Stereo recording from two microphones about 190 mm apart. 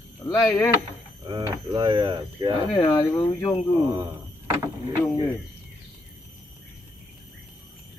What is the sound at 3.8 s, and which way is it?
Speech, 15° right (ahead or behind).